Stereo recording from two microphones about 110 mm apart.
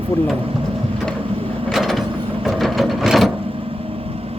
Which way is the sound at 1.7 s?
Centre (ahead or behind).